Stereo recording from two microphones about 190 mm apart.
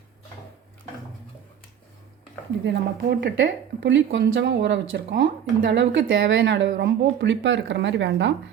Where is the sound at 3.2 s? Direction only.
65° right (ahead or behind).